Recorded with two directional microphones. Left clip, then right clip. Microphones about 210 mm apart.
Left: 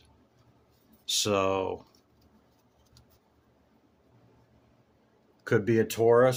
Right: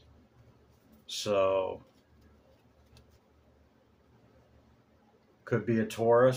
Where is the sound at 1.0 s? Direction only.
50° left (ahead or behind).